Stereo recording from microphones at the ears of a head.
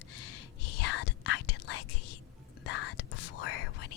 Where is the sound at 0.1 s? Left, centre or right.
Left.